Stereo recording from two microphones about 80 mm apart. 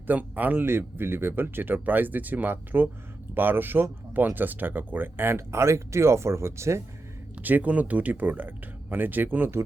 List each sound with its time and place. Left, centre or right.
0.1 s speech: right
7.4 s speech: centre